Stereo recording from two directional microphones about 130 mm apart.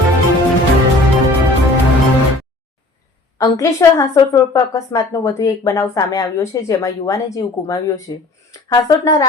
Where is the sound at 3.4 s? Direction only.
25° left (ahead or behind).